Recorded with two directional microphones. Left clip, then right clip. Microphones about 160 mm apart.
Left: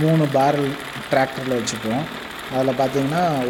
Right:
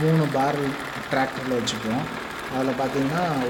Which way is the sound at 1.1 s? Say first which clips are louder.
Left 5 dB; 30° left (ahead or behind).